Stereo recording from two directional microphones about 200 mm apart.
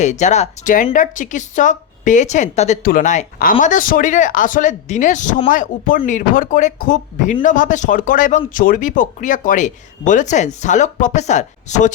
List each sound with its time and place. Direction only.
0.0 s speech: 35° left (ahead or behind)